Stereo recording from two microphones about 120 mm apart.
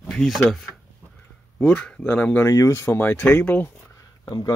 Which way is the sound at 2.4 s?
25° left (ahead or behind).